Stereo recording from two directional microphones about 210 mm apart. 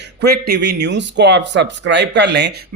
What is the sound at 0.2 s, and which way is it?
Speech, 50° right (ahead or behind).